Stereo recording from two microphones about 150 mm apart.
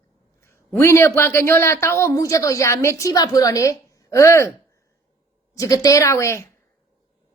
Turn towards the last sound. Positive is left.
turn(degrees=20)  # may be behind; listen again after turning